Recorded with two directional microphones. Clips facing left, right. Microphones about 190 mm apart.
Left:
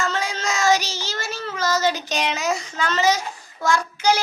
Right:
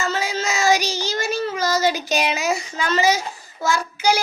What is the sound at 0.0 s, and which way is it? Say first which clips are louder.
Child singing: right 1 dB; 5° right (ahead or behind).